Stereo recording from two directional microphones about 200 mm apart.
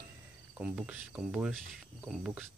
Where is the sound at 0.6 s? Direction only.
5° right (ahead or behind).